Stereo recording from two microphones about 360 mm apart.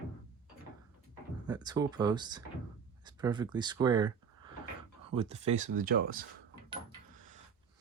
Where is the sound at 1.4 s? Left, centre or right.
Centre.